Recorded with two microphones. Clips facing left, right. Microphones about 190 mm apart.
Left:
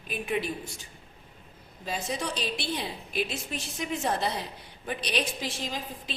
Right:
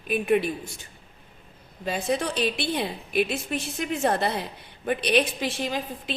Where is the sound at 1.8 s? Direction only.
60° right (ahead or behind).